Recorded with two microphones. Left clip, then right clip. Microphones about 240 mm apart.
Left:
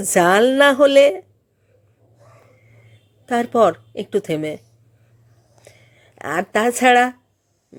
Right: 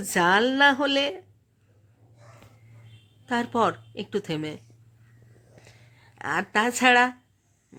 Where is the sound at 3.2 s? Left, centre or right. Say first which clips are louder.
Left 9 dB; centre.